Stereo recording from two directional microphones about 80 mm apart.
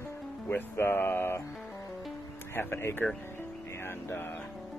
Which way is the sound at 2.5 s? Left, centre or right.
Left.